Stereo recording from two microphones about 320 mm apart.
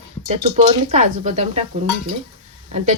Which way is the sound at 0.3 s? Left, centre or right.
Centre.